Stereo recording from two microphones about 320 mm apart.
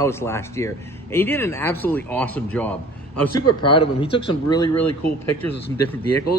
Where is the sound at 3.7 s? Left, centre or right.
Centre.